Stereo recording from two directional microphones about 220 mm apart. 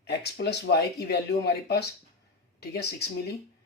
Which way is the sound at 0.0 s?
50° left (ahead or behind).